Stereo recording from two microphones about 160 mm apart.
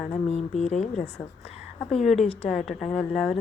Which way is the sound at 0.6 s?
45° left (ahead or behind).